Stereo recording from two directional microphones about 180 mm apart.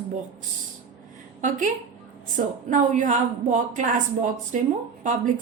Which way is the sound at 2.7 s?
45° right (ahead or behind).